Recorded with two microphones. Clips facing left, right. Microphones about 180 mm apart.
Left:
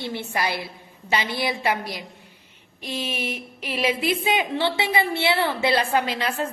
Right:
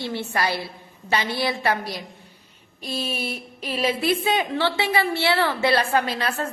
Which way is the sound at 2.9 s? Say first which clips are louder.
Right 1 dB; 35° right (ahead or behind).